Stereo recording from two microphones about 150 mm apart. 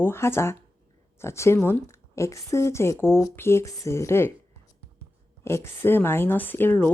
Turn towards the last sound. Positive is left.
turn(degrees=15)  # may be behind; listen again after turning